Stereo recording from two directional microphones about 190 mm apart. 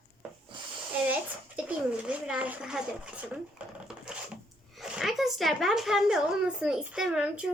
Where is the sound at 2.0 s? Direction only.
5° right (ahead or behind).